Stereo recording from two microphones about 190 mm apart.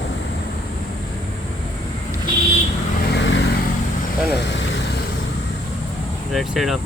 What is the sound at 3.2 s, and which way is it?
Vehicle, 70° left (ahead or behind).